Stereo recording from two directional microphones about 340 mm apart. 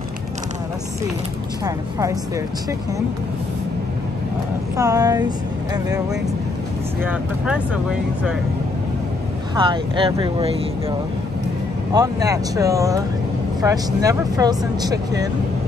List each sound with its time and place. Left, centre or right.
1.6 s speech: centre
4.7 s speech: centre
7.0 s speech: centre
9.6 s speech: centre
11.9 s speech: centre